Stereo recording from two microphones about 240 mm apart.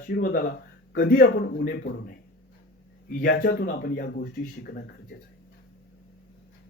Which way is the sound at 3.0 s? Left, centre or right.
Left.